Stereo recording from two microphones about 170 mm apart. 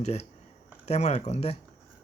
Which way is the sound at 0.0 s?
40° left (ahead or behind).